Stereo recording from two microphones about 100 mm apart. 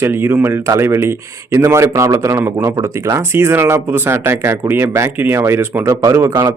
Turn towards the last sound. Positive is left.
turn(degrees=-25)  # may be behind; listen again after turning